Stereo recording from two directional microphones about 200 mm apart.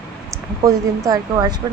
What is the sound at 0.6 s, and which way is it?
Speech, 15° right (ahead or behind).